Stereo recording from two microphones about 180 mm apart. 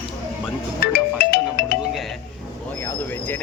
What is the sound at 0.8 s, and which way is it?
Music, 60° left (ahead or behind).